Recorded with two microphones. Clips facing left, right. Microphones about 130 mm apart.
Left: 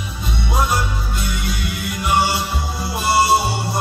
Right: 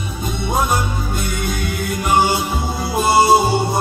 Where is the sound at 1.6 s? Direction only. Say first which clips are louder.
Right 2 dB; centre (ahead or behind).